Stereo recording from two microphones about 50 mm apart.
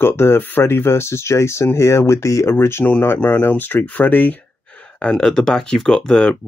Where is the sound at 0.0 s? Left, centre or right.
Left.